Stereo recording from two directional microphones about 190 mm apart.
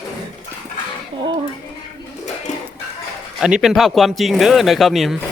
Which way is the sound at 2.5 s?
40° left (ahead or behind).